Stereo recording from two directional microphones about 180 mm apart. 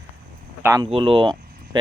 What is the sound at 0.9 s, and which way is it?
Speech, 30° right (ahead or behind).